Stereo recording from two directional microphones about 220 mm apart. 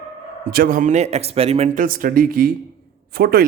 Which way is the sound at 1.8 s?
40° right (ahead or behind).